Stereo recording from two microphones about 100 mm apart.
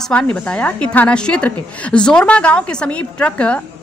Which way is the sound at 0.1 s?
10° left (ahead or behind).